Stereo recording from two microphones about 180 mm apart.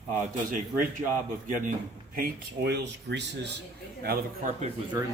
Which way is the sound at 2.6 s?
70° right (ahead or behind).